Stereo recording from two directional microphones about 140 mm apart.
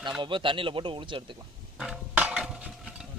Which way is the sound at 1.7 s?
5° right (ahead or behind).